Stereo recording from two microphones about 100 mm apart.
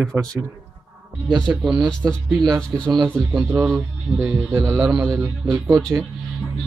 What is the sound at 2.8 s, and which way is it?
Speech, 45° right (ahead or behind).